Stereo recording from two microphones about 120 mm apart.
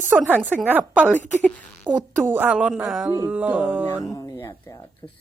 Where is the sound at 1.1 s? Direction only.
10° left (ahead or behind).